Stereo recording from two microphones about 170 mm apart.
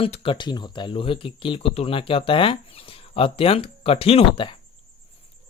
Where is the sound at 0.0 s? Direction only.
30° left (ahead or behind).